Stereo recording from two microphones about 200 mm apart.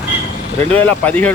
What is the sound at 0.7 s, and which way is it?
Speech, 10° left (ahead or behind).